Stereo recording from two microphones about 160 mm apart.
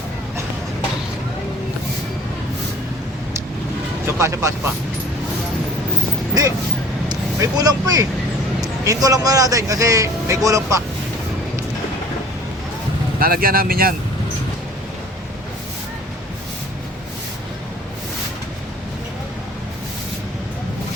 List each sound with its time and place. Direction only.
4.2 s a man's voice: 20° right (ahead or behind)
7.1 s a man's voice: 20° right (ahead or behind)
13.1 s speech: 70° right (ahead or behind)